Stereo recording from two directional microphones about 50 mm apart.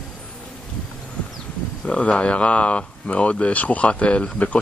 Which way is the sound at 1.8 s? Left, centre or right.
Left.